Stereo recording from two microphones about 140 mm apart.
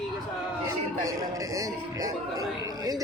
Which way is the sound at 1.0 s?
25° right (ahead or behind).